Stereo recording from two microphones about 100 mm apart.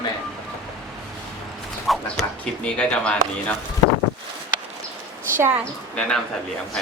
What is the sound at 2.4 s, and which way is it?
Speech, 10° left (ahead or behind).